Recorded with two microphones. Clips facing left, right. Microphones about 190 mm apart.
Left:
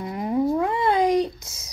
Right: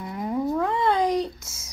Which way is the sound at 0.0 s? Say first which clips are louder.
Left 4 dB; 20° left (ahead or behind).